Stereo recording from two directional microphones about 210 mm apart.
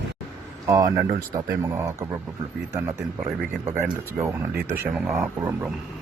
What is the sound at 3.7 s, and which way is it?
Speech, 10° right (ahead or behind).